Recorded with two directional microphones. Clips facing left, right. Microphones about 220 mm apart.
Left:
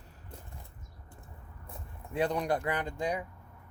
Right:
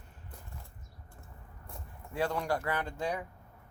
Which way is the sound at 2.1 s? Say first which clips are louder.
Left 2 dB; 20° left (ahead or behind).